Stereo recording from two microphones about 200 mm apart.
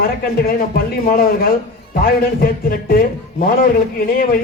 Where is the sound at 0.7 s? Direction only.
45° left (ahead or behind).